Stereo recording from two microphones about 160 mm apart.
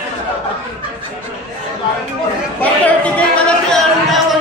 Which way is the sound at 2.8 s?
5° left (ahead or behind).